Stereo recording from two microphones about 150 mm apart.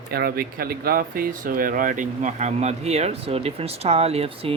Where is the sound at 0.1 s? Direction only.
90° right.